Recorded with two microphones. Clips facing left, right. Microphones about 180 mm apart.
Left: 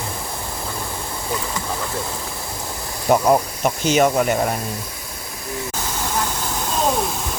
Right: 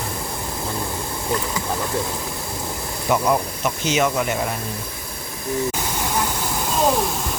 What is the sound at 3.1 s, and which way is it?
Speech, 45° left (ahead or behind).